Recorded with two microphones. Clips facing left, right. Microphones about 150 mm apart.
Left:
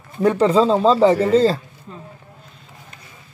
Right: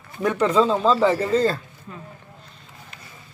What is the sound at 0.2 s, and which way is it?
Speech, 30° left (ahead or behind).